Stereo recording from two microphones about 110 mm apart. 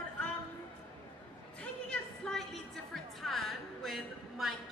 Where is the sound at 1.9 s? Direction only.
5° left (ahead or behind).